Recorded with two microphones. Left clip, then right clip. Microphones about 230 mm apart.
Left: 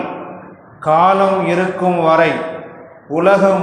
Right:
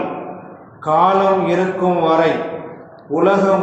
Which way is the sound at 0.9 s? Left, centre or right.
Left.